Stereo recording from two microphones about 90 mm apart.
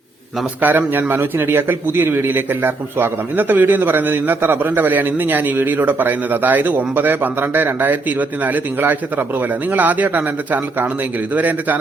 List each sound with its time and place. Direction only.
0.6 s a man's voice: 20° right (ahead or behind)